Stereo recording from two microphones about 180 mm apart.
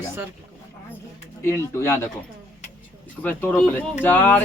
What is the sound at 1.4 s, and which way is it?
Speech, 15° left (ahead or behind).